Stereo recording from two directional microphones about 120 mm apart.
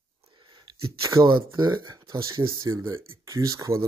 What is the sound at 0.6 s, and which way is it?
Speech, 30° right (ahead or behind).